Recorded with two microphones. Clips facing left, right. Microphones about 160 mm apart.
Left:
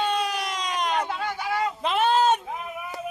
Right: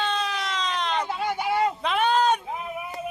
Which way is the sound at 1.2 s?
25° right (ahead or behind).